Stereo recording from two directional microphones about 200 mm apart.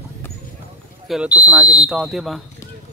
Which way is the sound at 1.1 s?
5° right (ahead or behind).